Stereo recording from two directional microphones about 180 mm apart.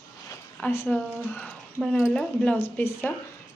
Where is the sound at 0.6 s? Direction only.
10° left (ahead or behind).